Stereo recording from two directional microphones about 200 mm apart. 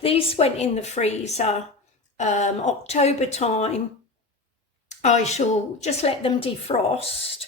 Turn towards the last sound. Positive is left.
turn(degrees=30)  # may be behind; listen again after turning